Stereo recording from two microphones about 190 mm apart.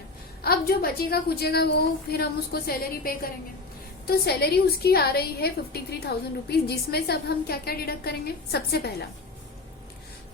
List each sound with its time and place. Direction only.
0.4 s a woman's voice: 55° left (ahead or behind)